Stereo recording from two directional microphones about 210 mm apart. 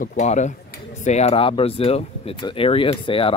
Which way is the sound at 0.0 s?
35° left (ahead or behind).